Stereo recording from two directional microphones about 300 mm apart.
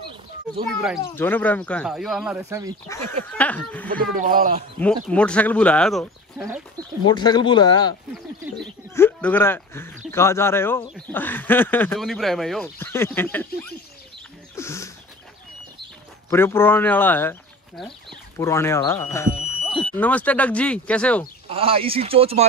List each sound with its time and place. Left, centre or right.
0.7 s speech: centre
3.1 s speech: centre
4.0 s a man's voice: right
4.7 s speech: centre
7.1 s speech: centre
14.5 s a sound: centre
16.3 s speech: centre
21.5 s a man's voice: centre